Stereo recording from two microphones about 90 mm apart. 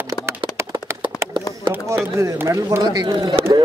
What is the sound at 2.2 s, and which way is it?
Speech, 35° right (ahead or behind).